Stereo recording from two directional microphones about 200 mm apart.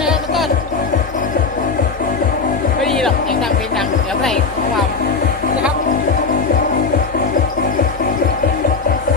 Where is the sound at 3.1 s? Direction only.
45° left (ahead or behind).